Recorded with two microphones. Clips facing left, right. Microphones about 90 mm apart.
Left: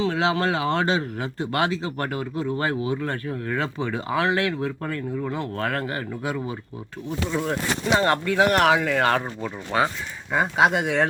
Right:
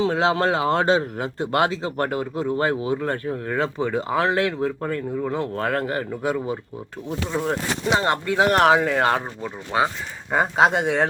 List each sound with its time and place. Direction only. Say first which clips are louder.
0.0 s speech: right 2 dB; 40° right (ahead or behind)
7.1 s speech: right 1 dB; 30° right (ahead or behind)
7.9 s speech: left 1 dB; 20° right (ahead or behind)
10.3 s speech: right 2 dB; 40° right (ahead or behind)